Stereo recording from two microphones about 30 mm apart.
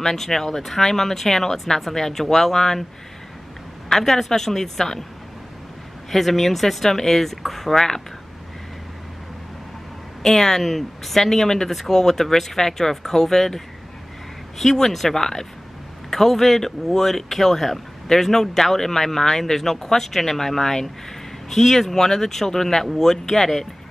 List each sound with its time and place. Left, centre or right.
0.0 s speech: centre
3.9 s speech: centre
6.0 s speech: centre
7.7 s speech: centre
10.2 s speech: centre
14.8 s speech: centre